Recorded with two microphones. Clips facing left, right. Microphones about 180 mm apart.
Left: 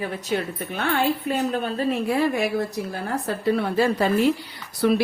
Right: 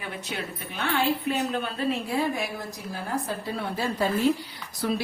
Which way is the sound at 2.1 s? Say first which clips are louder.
Left 6 dB; 70° left (ahead or behind).